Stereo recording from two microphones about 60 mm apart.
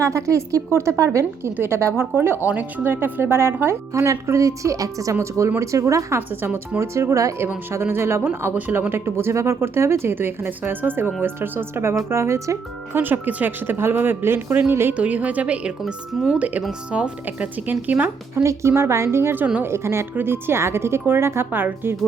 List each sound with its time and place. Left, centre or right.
0.0 s a woman's voice: right
1.5 s speech: right
2.5 s speech: right
5.1 s a woman's voice: right
6.1 s speech: right
6.7 s a woman's voice: right
7.7 s speech: right
13.0 s speech: right
14.9 s a woman's voice: right
17.7 s a woman's voice: right
18.4 s speech: right